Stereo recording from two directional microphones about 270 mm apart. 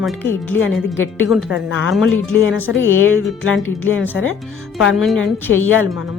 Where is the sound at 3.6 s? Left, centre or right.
Centre.